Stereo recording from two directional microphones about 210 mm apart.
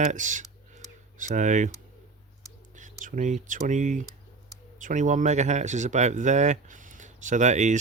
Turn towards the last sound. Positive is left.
turn(degrees=-35)  # may be behind; listen again after turning